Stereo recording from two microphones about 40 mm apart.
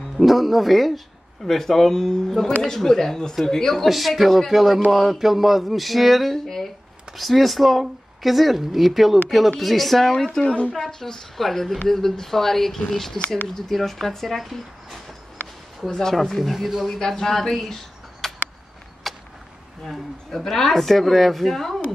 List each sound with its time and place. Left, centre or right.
0.2 s speech: centre
6.3 s a sound: centre
7.2 s speech: centre
10.1 s speech: centre
10.4 s speech: left
10.8 s speech: centre
15.9 s speech: centre
16.2 s speech: centre
18.2 s a sound: centre
19.1 s a sound: centre
20.3 s speech: centre